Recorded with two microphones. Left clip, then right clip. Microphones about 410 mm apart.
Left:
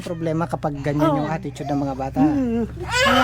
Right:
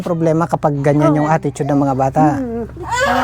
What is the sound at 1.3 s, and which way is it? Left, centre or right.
Speech, right.